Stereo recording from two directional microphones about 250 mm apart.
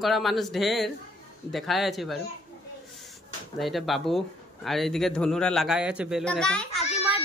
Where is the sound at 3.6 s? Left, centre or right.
Centre.